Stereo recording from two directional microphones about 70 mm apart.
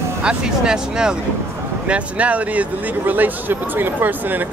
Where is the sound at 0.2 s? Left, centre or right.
Centre.